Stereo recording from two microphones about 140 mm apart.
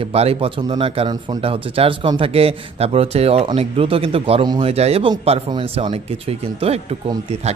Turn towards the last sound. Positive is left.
turn(degrees=-45)  # may be behind; listen again after turning